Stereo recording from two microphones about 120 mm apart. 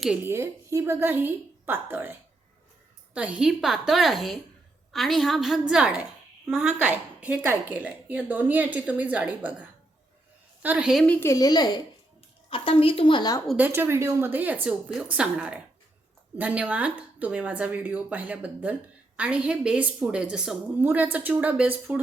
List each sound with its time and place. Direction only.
0.2 s a woman's voice: 20° right (ahead or behind)
3.2 s a woman's voice: 10° right (ahead or behind)
11.0 s a woman's voice: 15° left (ahead or behind)
11.3 s a child's voice: 30° left (ahead or behind)
12.5 s a woman's voice: 50° left (ahead or behind)
13.6 s a woman's voice: 15° right (ahead or behind)